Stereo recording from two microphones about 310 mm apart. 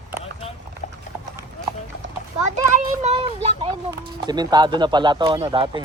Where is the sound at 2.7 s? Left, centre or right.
Right.